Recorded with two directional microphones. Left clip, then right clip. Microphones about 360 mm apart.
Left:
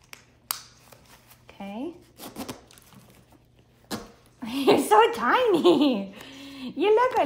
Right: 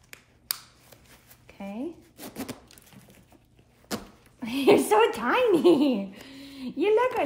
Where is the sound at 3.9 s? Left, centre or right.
Centre.